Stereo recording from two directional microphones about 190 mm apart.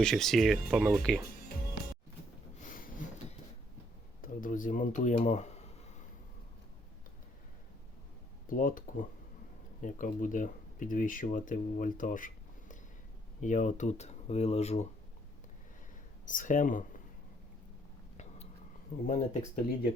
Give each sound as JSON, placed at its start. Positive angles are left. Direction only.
{"t": 0.0, "sound": "speech", "side_deg": 0}
{"t": 2.6, "sound": "a sound", "side_deg": 45}
{"t": 4.2, "sound": "speech", "side_deg": 45}
{"t": 8.4, "sound": "speech", "side_deg": 45}
{"t": 16.2, "sound": "speech", "side_deg": 45}
{"t": 19.0, "sound": "speech", "side_deg": 40}